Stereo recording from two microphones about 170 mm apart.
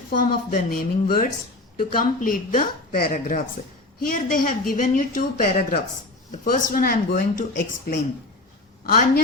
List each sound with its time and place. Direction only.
0.1 s speech: 55° left (ahead or behind)